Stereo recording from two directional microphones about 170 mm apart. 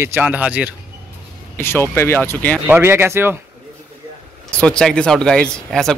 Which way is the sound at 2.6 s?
10° right (ahead or behind).